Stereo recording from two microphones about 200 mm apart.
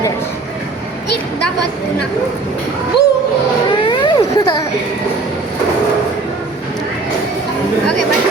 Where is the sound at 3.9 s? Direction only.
20° left (ahead or behind).